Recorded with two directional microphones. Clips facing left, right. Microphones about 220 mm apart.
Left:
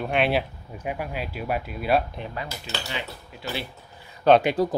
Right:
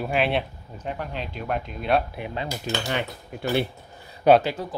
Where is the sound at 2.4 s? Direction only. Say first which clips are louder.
Right 6 dB; 15° right (ahead or behind).